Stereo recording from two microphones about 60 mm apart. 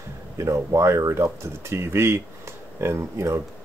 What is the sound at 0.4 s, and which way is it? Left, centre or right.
Speech, right.